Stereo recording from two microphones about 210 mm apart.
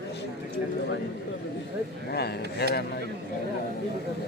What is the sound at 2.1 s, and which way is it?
Speech, 50° left (ahead or behind).